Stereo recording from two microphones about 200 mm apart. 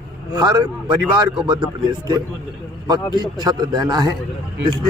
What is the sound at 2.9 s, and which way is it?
A man's voice, 20° right (ahead or behind).